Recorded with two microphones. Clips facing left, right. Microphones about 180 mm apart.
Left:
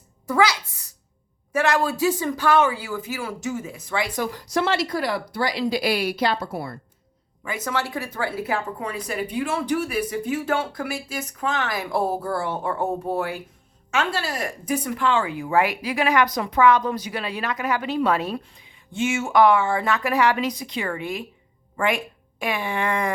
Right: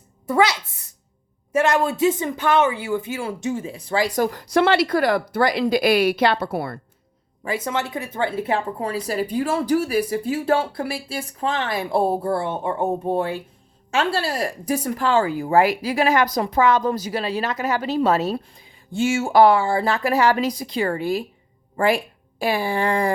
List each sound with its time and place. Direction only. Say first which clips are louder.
0.3 s a woman's voice: right 2 dB; 25° right (ahead or behind); by 6.7 s 70° right (ahead or behind)
7.4 s speech: right 3 dB; 30° right (ahead or behind)